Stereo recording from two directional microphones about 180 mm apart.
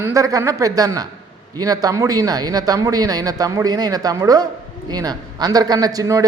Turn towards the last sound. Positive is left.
turn(degrees=-20)  # may be behind; listen again after turning